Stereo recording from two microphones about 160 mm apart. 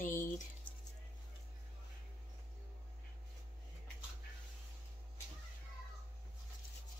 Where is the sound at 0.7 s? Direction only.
30° left (ahead or behind).